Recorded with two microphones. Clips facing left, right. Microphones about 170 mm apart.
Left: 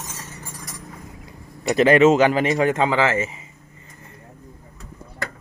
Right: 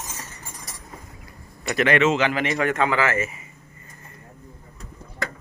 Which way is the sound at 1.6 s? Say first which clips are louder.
Left 6 dB; 30° left (ahead or behind).